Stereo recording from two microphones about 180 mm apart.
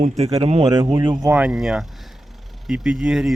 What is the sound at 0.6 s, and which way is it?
Speech, 20° right (ahead or behind).